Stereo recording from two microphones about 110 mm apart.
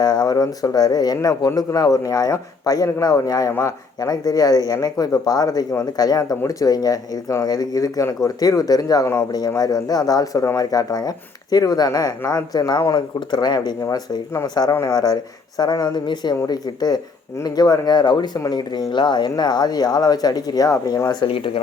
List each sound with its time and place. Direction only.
0.0 s a man's voice: 40° left (ahead or behind)
13.8 s a man's voice: 30° left (ahead or behind)
21.2 s speech: 55° left (ahead or behind)